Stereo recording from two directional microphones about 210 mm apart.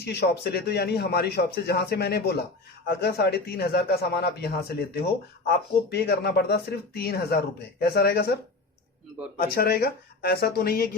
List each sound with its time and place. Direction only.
0.0 s speech: 50° left (ahead or behind)
9.4 s speech: 45° left (ahead or behind)